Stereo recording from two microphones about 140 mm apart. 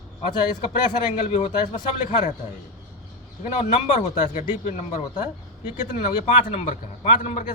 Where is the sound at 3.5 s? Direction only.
55° left (ahead or behind).